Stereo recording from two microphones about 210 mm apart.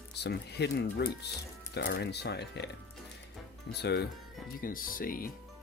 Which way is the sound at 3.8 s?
55° left (ahead or behind).